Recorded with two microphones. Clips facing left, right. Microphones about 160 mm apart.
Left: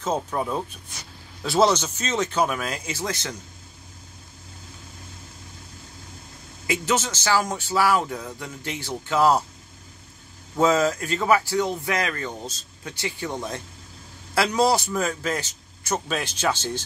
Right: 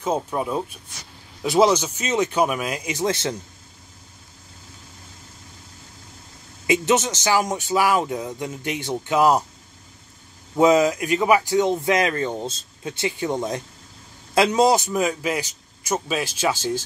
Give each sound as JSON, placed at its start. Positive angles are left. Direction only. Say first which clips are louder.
{"t": 0.0, "sound": "a man's voice", "louder": "right 2 dB", "side_deg": -10}
{"t": 6.7, "sound": "speech", "louder": "right 5 dB", "side_deg": -20}
{"t": 10.5, "sound": "a man's voice", "louder": "right 4 dB", "side_deg": -15}